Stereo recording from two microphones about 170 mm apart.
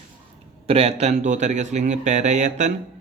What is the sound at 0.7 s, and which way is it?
Speech, 35° right (ahead or behind).